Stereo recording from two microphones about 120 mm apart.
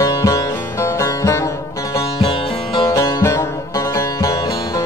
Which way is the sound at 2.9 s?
25° left (ahead or behind).